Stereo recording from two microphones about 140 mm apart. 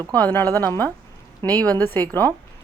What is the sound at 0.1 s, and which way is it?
Speech, 10° left (ahead or behind).